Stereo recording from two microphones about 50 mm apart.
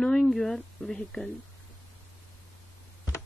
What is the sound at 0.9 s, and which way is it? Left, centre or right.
Speech, centre.